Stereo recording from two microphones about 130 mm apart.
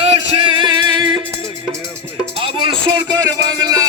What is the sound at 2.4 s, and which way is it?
Speech, 40° right (ahead or behind).